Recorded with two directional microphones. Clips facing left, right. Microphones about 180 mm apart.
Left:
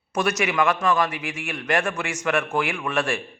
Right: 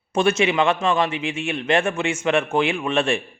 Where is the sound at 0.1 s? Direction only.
25° right (ahead or behind).